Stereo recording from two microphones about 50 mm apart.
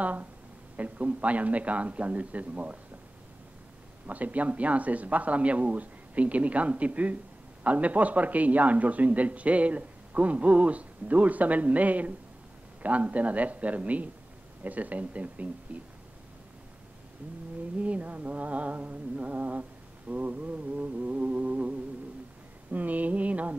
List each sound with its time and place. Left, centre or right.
0.0 s a woman's voice: right
4.1 s a man's voice: right
17.7 s a man's voice: right